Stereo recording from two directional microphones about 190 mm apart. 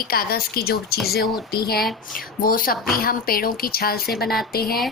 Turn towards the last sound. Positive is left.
turn(degrees=55)  # may be behind; listen again after turning